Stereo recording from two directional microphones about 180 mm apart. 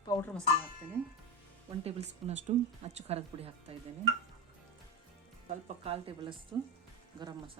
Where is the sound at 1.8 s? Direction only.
35° right (ahead or behind).